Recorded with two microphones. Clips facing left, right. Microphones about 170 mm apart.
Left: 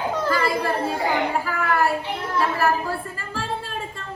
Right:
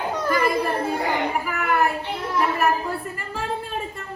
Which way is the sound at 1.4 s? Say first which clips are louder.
Even; 20° right (ahead or behind).